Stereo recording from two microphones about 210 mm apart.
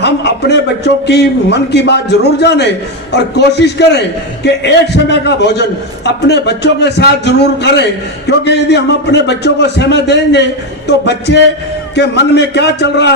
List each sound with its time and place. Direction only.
0.0 s a man's voice: 55° left (ahead or behind)